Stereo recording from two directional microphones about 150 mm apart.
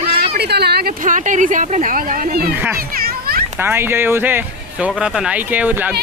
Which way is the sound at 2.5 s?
15° right (ahead or behind).